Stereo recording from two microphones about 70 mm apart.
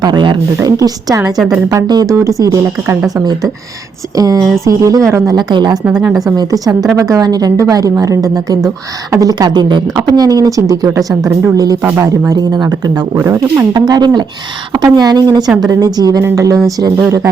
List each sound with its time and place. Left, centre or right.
0.6 s a woman's voice: right
1.9 s a woman's voice: right
2.1 s a woman's voice: right
4.2 s a woman's voice: right
5.4 s speech: right
6.3 s a woman's voice: right
11.5 s a woman's voice: right
12.3 s speech: right
13.1 s speech: right
13.7 s speech: right
14.9 s a woman's voice: right
16.3 s a woman's voice: right